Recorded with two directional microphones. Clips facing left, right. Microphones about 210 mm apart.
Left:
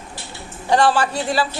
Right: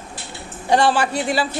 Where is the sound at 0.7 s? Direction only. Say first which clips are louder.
Even; 20° right (ahead or behind).